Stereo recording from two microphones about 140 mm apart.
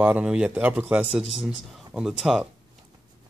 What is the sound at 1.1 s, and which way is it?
A man's voice, centre (ahead or behind).